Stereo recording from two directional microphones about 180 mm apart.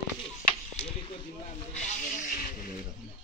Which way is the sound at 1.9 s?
45° left (ahead or behind).